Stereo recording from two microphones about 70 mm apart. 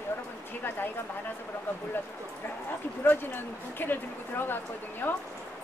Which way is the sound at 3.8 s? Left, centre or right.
Left.